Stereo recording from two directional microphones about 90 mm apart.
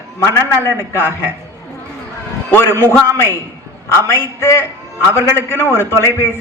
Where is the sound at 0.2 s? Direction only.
30° left (ahead or behind).